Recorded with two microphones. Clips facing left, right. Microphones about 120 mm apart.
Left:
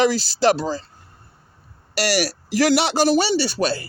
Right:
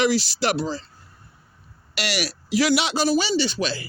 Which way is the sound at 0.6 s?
45° left (ahead or behind).